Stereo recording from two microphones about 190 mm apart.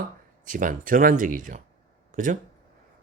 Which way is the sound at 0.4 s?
45° right (ahead or behind).